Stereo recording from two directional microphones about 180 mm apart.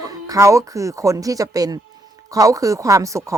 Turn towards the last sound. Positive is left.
turn(degrees=-15)  # may be behind; listen again after turning